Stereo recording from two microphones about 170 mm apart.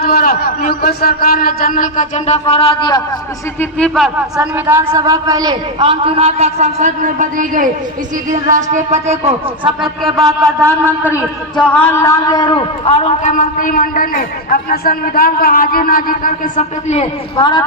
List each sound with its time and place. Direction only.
0.0 s a man's voice: 60° left (ahead or behind); by 3.0 s 30° left (ahead or behind)
3.6 s a man's voice: 5° left (ahead or behind)
4.4 s a man's voice: 10° right (ahead or behind); by 9.7 s 40° right (ahead or behind)
10.6 s a man's voice: 15° right (ahead or behind)
11.5 s a man's voice: 10° left (ahead or behind); by 13.3 s 35° left (ahead or behind)
13.3 s a man's voice: 50° left (ahead or behind); by 17.7 s 25° left (ahead or behind)